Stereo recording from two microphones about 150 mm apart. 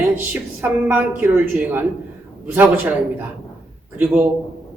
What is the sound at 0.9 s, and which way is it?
A man's voice, 10° right (ahead or behind).